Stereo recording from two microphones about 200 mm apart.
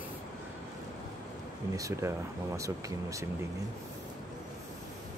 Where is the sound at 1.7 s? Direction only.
15° right (ahead or behind).